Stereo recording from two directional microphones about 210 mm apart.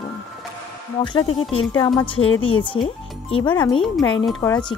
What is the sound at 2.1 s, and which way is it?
Speech, 70° left (ahead or behind).